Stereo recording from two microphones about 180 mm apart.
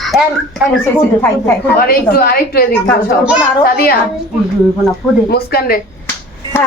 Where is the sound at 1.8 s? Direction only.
55° left (ahead or behind).